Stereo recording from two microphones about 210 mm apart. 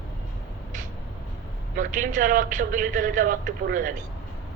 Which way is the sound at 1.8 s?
40° right (ahead or behind).